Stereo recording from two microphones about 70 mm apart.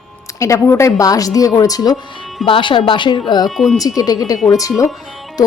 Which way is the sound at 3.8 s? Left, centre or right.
Left.